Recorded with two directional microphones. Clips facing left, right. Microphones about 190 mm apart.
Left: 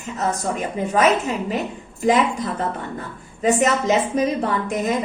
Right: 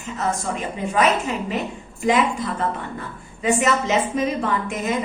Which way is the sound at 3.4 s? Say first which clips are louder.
Left 2 dB; 40° left (ahead or behind).